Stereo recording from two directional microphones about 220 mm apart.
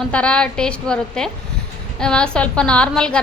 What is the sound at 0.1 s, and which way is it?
A woman's voice, 5° left (ahead or behind).